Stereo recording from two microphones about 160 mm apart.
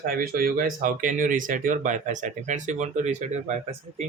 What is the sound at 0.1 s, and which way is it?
Speech, 65° right (ahead or behind).